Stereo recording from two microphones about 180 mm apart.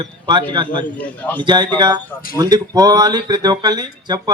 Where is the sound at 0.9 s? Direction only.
10° left (ahead or behind).